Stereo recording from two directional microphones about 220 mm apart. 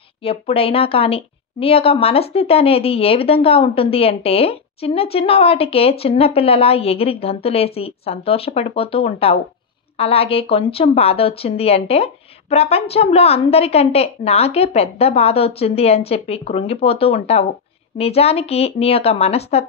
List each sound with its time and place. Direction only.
0.2 s a woman's voice: 25° left (ahead or behind)